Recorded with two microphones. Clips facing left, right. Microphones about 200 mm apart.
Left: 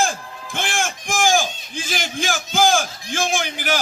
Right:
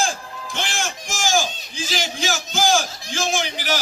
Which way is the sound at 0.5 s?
55° left (ahead or behind).